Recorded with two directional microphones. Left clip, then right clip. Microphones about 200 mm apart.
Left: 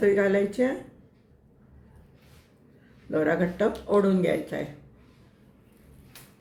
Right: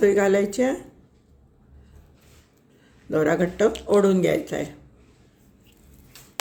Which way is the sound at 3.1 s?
50° right (ahead or behind).